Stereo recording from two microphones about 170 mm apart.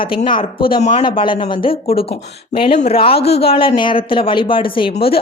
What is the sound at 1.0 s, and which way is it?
Speech, 30° left (ahead or behind).